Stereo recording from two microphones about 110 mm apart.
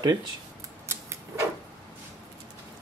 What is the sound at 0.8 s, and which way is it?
Scissors, 25° right (ahead or behind).